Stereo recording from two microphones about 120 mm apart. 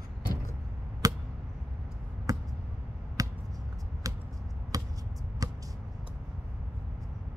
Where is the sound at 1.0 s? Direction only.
30° right (ahead or behind).